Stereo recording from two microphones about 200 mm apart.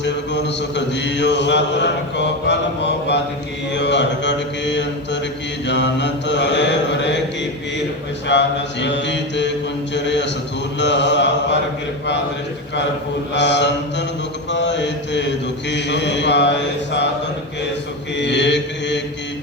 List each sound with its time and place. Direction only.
0.0 s mantra: 60° left (ahead or behind)
8.3 s mantra: 60° left (ahead or behind)
9.9 s speech: 60° left (ahead or behind)
10.8 s mantra: 60° left (ahead or behind)
13.3 s mantra: 60° left (ahead or behind)
18.2 s mantra: 60° left (ahead or behind)